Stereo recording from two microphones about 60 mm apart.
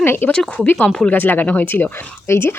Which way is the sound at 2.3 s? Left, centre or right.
Left.